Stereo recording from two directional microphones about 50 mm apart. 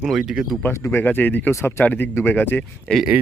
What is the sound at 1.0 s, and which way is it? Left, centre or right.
Speech, left.